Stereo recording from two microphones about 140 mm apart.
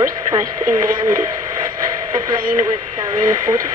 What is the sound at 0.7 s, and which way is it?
Speech, 70° right (ahead or behind).